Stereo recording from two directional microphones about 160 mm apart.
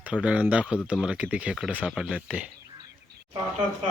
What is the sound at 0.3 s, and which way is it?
Speech, 5° right (ahead or behind).